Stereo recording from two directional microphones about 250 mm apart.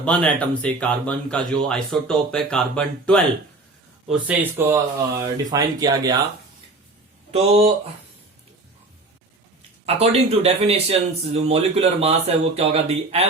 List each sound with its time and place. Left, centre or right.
0.0 s speech: centre
4.1 s speech: centre
7.3 s speech: right
9.8 s speech: right